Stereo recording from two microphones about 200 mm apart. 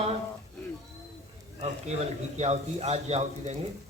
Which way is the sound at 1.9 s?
35° right (ahead or behind).